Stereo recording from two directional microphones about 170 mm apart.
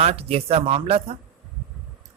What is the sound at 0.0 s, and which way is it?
A man's voice, 35° right (ahead or behind).